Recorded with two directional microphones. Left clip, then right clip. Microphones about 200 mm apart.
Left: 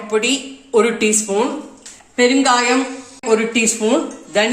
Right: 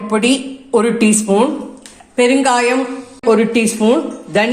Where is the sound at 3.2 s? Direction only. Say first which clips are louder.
Right 3 dB; 20° right (ahead or behind).